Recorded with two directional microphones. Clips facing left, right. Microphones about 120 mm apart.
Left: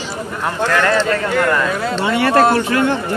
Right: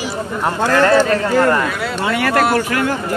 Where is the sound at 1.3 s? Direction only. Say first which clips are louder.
Right 2 dB; 30° right (ahead or behind).